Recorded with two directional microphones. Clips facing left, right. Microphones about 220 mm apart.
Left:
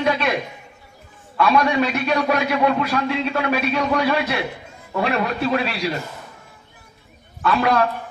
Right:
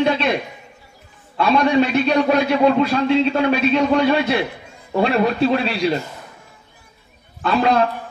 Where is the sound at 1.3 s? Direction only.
30° right (ahead or behind).